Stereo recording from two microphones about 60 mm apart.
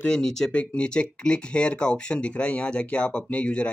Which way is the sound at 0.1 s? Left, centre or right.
Centre.